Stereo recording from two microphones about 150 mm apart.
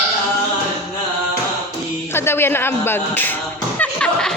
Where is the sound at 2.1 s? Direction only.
15° left (ahead or behind).